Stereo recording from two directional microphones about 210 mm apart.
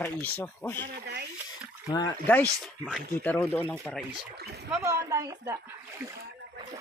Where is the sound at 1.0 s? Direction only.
50° right (ahead or behind).